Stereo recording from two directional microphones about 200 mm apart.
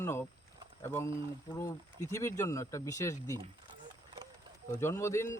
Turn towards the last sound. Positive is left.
turn(degrees=15)  # may be behind; listen again after turning